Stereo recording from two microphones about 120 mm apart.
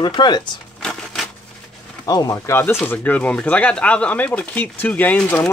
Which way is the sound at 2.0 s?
30° left (ahead or behind).